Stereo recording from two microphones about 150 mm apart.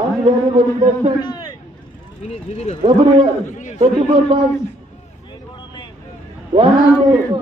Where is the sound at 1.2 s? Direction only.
30° left (ahead or behind).